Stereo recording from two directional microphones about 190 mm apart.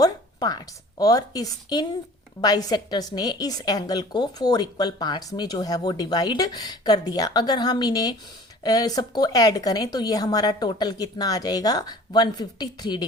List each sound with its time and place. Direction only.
0.0 s a woman's voice: 20° left (ahead or behind)